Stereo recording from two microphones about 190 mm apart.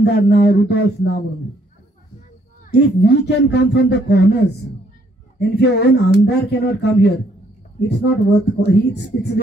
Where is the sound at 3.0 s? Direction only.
60° left (ahead or behind).